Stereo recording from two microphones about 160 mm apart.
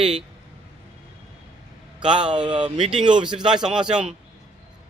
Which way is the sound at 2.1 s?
5° right (ahead or behind).